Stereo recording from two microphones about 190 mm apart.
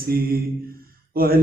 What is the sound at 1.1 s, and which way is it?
Speech, 50° right (ahead or behind).